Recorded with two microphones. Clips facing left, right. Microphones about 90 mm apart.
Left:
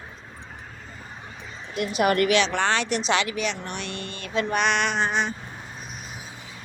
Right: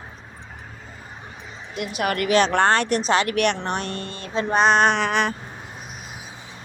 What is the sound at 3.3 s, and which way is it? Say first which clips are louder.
Speech: right 7 dB; 65° right (ahead or behind).